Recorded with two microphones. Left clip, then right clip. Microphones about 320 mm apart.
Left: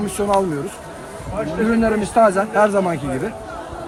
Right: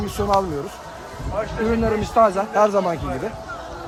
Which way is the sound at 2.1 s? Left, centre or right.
Right.